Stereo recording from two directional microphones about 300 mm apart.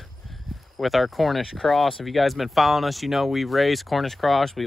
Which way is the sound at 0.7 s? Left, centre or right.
Centre.